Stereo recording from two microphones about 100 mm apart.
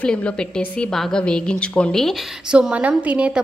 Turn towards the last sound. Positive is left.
turn(degrees=-10)  # may be behind; listen again after turning